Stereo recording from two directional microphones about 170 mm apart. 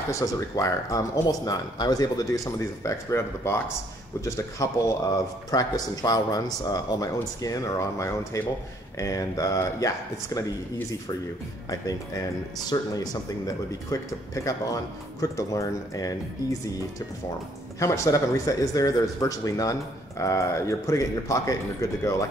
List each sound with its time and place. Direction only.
0.1 s speech: 20° left (ahead or behind)
11.7 s speech: 20° left (ahead or behind)
17.7 s speech: 20° left (ahead or behind)